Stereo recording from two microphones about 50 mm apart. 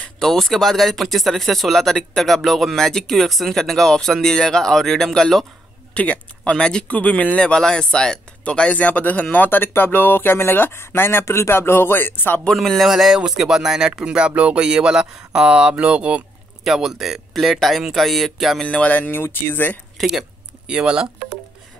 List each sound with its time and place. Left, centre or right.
0.2 s speech: centre
5.9 s speech: left
7.4 s speech: centre; by 12.4 s left
12.5 s speech: centre; by 16.3 s right
16.6 s speech: centre
18.7 s speech: left
19.1 s speech: left
20.0 s speech: centre
20.6 s speech: centre